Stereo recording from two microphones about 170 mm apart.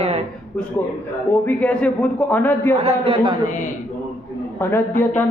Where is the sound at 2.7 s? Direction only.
35° right (ahead or behind).